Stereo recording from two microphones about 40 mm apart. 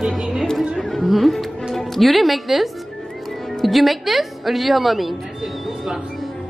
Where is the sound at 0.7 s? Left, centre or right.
Centre.